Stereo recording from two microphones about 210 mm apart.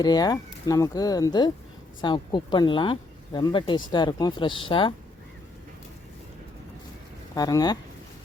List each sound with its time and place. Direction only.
0.0 s speech: 20° left (ahead or behind)
7.3 s speech: 20° left (ahead or behind)